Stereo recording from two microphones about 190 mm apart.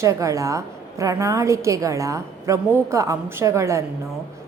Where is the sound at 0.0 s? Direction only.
15° right (ahead or behind).